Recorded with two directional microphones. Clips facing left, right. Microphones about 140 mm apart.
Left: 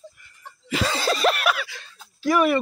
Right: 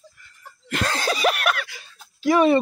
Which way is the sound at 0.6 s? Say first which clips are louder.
Left 1 dB; centre (ahead or behind).